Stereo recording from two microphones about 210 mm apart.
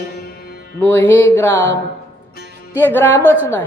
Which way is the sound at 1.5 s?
60° right (ahead or behind).